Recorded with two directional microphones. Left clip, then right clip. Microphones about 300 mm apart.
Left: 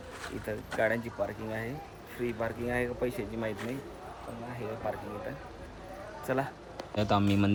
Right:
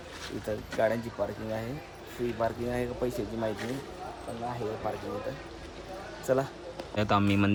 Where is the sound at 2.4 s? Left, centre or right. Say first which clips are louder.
Right 2 dB; centre.